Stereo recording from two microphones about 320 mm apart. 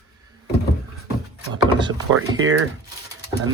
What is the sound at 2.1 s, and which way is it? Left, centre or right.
Speech, right.